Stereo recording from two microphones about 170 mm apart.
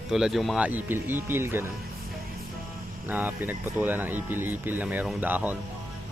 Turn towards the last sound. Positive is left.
turn(degrees=-10)  # may be behind; listen again after turning